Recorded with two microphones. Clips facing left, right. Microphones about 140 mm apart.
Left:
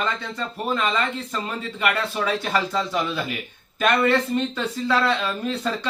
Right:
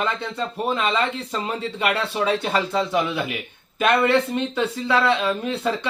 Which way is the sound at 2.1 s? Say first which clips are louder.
Right 2 dB; 20° right (ahead or behind).